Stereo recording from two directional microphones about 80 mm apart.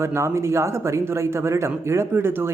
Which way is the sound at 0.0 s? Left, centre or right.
Right.